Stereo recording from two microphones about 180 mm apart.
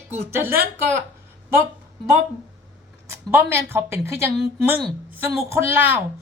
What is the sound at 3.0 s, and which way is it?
A woman's voice, 15° right (ahead or behind).